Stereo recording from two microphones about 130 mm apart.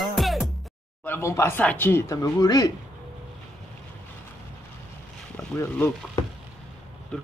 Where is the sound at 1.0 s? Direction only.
20° left (ahead or behind).